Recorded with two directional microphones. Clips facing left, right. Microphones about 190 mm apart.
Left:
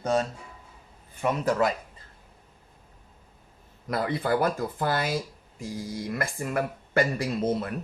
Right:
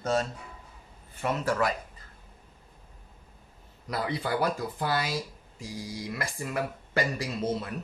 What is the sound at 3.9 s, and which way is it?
Speech, 50° left (ahead or behind).